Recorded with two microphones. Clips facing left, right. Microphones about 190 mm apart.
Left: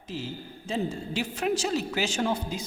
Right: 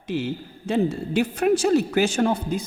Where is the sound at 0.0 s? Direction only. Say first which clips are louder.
Right 9 dB; 70° right (ahead or behind).